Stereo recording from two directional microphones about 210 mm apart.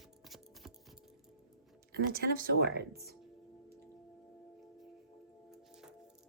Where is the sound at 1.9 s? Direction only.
50° right (ahead or behind).